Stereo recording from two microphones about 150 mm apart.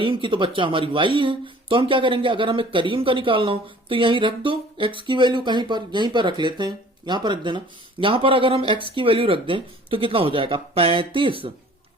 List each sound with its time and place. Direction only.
0.0 s speech: 35° right (ahead or behind)